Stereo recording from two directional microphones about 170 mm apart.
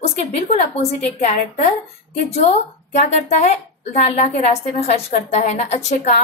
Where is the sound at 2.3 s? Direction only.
40° left (ahead or behind).